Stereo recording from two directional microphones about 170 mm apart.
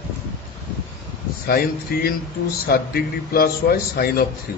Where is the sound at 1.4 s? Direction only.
65° left (ahead or behind).